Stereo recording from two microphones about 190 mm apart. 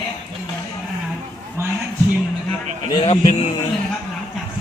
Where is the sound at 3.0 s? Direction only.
30° left (ahead or behind).